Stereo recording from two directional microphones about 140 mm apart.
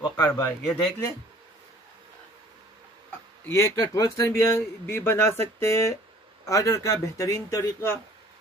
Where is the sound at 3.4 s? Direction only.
20° left (ahead or behind).